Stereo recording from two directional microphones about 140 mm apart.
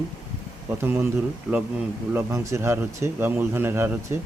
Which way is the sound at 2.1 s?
15° right (ahead or behind).